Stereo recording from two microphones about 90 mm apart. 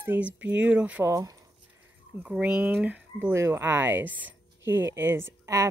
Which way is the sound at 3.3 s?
30° right (ahead or behind).